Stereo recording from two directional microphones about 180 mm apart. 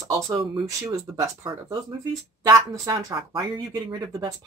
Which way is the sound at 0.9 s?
20° right (ahead or behind).